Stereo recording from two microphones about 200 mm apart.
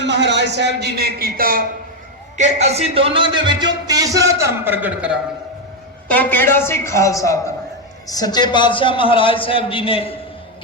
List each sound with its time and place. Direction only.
0.0 s a man's voice: 60° right (ahead or behind)
2.4 s speech: 35° right (ahead or behind); by 5.1 s 5° right (ahead or behind)
6.1 s a woman's voice: 10° left (ahead or behind); by 10.2 s 25° left (ahead or behind)